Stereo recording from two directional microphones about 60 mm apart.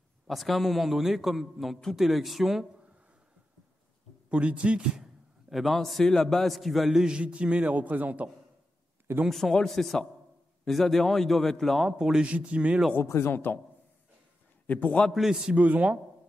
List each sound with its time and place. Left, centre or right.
0.3 s a man's voice: centre
4.3 s a man's voice: right
5.5 s a man's voice: centre
7.0 s a man's voice: centre
9.3 s a man's voice: centre
12.0 s a man's voice: centre
12.9 s speech: left
14.7 s a man's voice: left
15.1 s a man's voice: centre
15.5 s a man's voice: right